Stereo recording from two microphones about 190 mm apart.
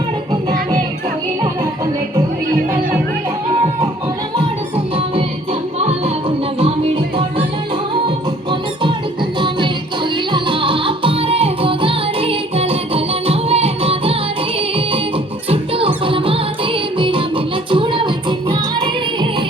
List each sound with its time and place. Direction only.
6.6 s music: 30° right (ahead or behind)
15.4 s music: 30° right (ahead or behind)